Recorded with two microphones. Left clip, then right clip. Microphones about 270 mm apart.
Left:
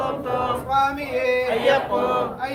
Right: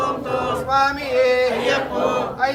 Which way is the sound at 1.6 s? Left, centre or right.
Left.